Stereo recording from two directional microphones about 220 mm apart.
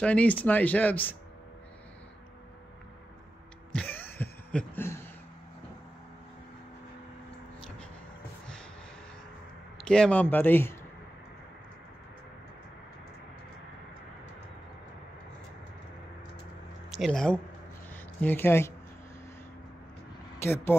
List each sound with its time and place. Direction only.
0.0 s speech: 5° left (ahead or behind)
3.7 s a sound: 10° left (ahead or behind)
9.8 s speech: 5° left (ahead or behind)
16.9 s speech: centre (ahead or behind)
20.3 s speech: 10° left (ahead or behind)